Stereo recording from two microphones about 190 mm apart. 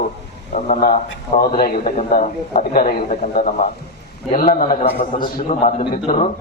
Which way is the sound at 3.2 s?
40° left (ahead or behind).